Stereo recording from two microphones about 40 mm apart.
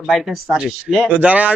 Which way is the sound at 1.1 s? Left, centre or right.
Right.